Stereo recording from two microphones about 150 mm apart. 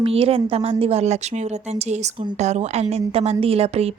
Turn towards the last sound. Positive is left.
turn(degrees=-45)  # may be behind; listen again after turning